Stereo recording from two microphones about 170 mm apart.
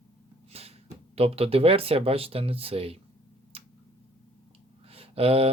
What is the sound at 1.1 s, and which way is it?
Speech, 35° right (ahead or behind).